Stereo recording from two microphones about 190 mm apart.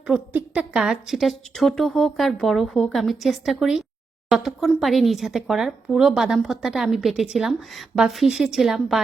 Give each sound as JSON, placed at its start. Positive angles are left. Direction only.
{"t": 0.1, "sound": "speech", "side_deg": -5}